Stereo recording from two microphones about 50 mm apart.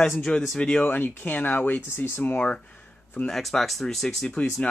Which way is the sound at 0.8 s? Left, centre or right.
Left.